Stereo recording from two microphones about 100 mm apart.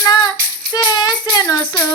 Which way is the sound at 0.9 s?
40° left (ahead or behind).